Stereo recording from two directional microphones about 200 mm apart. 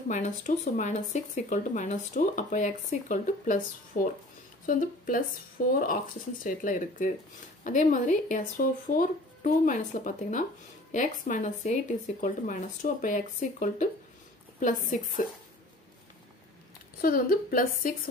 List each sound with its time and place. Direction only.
0.1 s a woman's voice: 35° left (ahead or behind)
17.0 s a woman's voice: 45° left (ahead or behind)